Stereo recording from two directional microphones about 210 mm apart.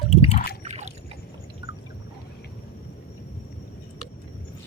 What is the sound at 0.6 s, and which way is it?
Boat, 35° right (ahead or behind).